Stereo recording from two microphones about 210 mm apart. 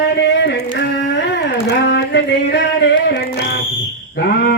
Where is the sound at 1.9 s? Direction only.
55° left (ahead or behind).